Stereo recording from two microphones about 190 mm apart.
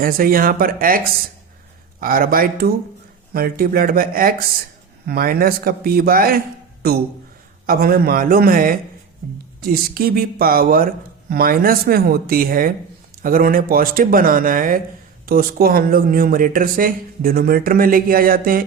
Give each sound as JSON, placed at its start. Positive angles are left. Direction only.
{"t": 0.0, "sound": "speech", "side_deg": -50}
{"t": 7.7, "sound": "speech", "side_deg": -50}